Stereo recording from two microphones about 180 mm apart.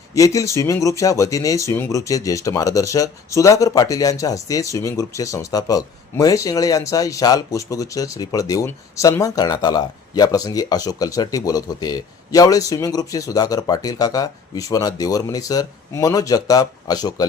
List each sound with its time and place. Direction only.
0.1 s speech: 20° left (ahead or behind)